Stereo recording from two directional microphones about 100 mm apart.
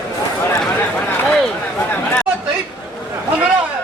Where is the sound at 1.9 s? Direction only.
15° left (ahead or behind).